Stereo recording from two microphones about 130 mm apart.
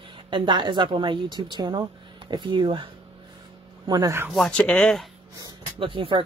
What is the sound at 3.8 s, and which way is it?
Speech, 30° right (ahead or behind).